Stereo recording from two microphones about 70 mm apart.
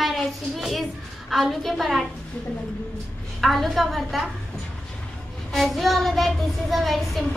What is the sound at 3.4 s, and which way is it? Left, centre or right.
Speech, centre.